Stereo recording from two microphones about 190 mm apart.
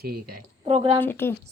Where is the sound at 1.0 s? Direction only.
10° left (ahead or behind).